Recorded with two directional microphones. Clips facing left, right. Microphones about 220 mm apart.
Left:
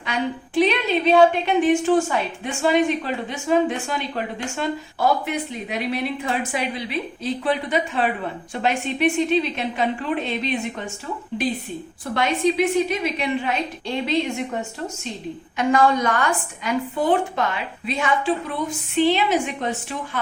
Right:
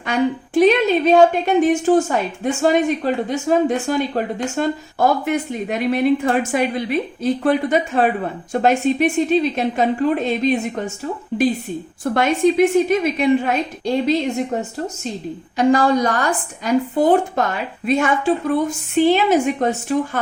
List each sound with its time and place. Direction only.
0.0 s a woman's voice: 45° right (ahead or behind)
12.1 s a woman's voice: 50° right (ahead or behind)